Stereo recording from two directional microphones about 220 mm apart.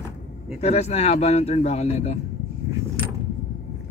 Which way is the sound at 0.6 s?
30° left (ahead or behind).